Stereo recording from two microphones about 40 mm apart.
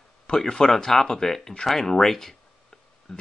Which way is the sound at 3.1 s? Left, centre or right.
Centre.